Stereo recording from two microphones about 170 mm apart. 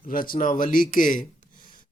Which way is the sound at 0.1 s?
55° left (ahead or behind).